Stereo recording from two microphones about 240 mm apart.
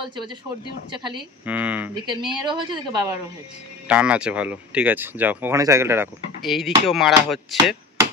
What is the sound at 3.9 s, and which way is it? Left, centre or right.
Speech, centre.